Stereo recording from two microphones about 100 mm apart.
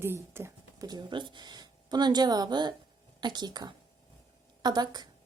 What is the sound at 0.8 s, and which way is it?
A woman's voice, 45° right (ahead or behind).